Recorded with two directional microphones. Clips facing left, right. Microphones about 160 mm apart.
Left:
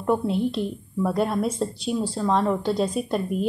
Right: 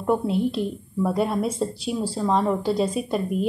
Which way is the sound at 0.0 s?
5° right (ahead or behind).